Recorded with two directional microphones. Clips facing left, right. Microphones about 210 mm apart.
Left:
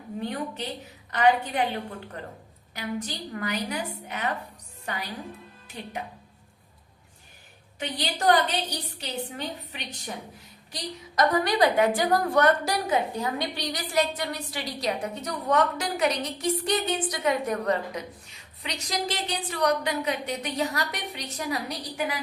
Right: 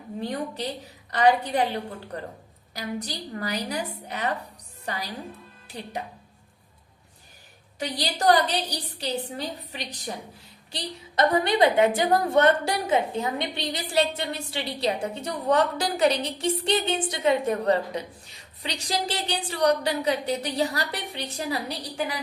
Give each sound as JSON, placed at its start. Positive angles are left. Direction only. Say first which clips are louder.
{"t": 0.2, "sound": "a woman's voice", "louder": "right 2 dB", "side_deg": -35}
{"t": 2.7, "sound": "a woman's voice", "louder": "even", "side_deg": -35}
{"t": 7.8, "sound": "a woman's voice", "louder": "right 2 dB", "side_deg": -35}